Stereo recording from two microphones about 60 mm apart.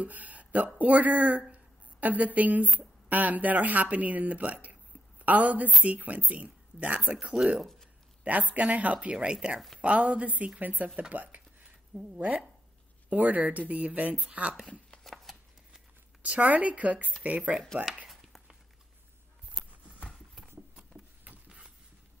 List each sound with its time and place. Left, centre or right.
0.0 s a sound: right
0.7 s a woman's voice: right
8.2 s speech: right
11.9 s speech: centre
13.1 s speech: right
15.3 s shuffling cards: centre
16.2 s speech: right
18.0 s a sound: centre
20.3 s patter: centre
21.5 s a sound: centre